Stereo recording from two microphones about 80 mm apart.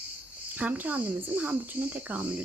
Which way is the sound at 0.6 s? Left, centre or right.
Right.